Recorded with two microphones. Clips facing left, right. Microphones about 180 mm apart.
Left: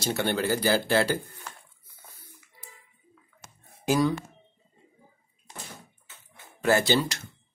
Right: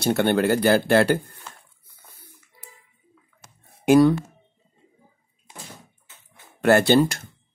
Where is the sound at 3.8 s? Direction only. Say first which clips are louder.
Right 9 dB; 60° right (ahead or behind).